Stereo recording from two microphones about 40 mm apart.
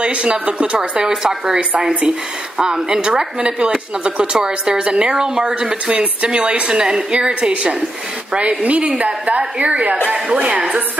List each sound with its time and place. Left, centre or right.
0.0 s a woman's voice: right
1.0 s a woman's voice: centre